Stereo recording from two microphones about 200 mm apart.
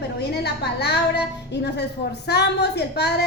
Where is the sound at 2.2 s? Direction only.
55° left (ahead or behind).